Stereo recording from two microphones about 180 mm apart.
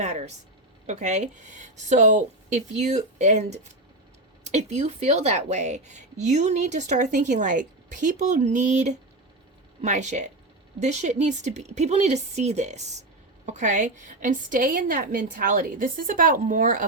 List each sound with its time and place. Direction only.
0.0 s a woman's voice: 40° right (ahead or behind)